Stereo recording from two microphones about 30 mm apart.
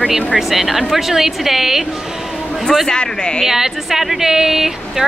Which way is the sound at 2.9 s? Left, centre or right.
Left.